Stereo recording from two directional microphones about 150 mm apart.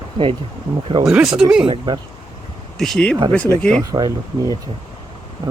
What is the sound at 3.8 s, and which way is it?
Speech, 20° right (ahead or behind).